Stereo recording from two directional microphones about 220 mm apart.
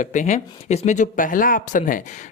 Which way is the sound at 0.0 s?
35° left (ahead or behind).